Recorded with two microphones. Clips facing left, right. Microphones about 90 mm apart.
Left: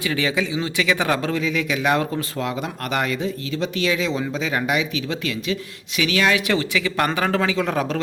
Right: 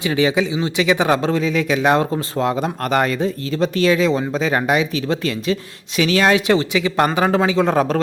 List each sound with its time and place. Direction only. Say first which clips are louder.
0.0 s speech: right 5 dB; 25° right (ahead or behind); by 8.0 s 40° right (ahead or behind)